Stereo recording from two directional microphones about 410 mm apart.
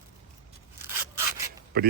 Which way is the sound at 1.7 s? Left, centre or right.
Right.